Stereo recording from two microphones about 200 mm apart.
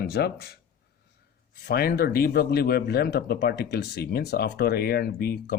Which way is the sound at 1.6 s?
50° left (ahead or behind).